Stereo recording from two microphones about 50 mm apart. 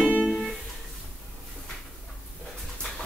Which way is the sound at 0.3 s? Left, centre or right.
Centre.